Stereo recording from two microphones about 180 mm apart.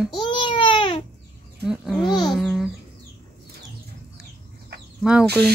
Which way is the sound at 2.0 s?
25° left (ahead or behind).